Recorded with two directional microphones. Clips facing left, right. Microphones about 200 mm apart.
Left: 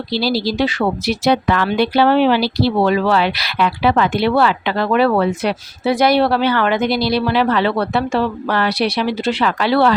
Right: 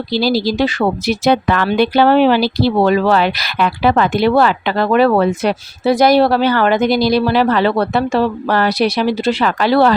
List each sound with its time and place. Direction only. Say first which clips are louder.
0.1 s speech: right 3 dB; 45° right (ahead or behind)